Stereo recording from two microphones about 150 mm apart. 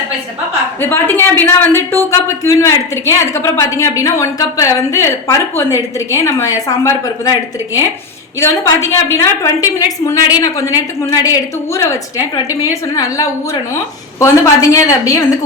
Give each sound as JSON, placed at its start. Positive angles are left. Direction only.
{"t": 0.8, "sound": "speech", "side_deg": 15}